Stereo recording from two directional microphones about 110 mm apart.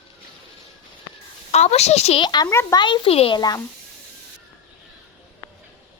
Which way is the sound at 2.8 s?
45° left (ahead or behind).